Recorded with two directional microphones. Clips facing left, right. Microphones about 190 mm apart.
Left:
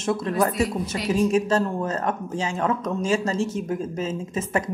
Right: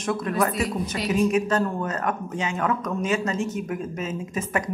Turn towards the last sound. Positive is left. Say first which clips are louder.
# left 1 dB
turn(degrees=25)  # may be behind; listen again after turning